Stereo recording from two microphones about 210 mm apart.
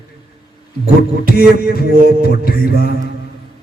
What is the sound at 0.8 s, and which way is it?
A man's voice, 45° left (ahead or behind).